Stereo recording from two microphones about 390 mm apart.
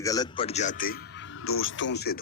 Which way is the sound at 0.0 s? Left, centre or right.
Centre.